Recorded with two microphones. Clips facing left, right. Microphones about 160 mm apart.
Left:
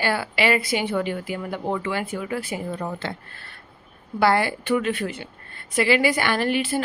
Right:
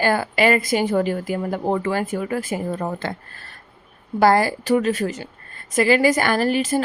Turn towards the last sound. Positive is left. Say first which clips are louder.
# right 3 dB
turn(degrees=-40)  # may be behind; listen again after turning